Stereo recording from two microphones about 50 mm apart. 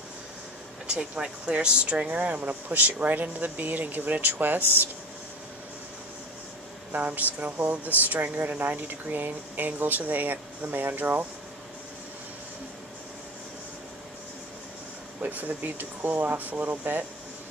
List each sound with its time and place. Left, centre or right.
0.8 s speech: right
6.9 s speech: right
15.2 s speech: right